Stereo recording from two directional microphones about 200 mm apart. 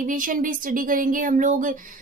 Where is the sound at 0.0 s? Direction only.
40° right (ahead or behind).